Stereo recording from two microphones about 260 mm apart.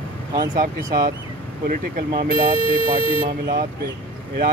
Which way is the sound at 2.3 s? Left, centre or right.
Left.